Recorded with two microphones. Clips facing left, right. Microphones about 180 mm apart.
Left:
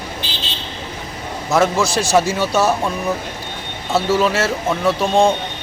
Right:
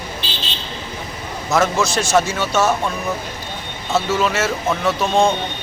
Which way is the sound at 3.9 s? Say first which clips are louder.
Left 2 dB; 35° left (ahead or behind).